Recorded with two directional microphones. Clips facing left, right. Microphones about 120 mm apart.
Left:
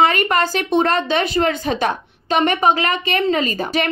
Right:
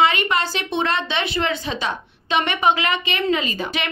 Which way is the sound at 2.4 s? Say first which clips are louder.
Left 3 dB; 40° left (ahead or behind).